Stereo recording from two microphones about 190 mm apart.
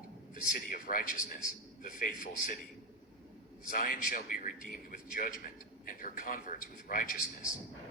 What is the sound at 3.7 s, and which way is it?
A man's voice, 50° left (ahead or behind).